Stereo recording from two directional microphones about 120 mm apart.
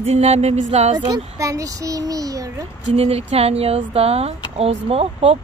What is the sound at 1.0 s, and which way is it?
A child's voice, 30° right (ahead or behind).